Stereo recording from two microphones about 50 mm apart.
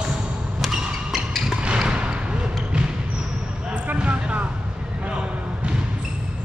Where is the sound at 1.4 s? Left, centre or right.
Centre.